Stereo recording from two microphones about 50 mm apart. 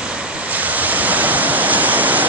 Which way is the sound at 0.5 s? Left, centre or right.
Right.